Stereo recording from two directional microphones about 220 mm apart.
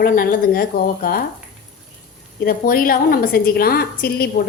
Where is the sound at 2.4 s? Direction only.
40° left (ahead or behind).